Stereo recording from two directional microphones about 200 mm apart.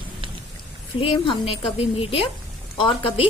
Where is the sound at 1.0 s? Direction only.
25° left (ahead or behind).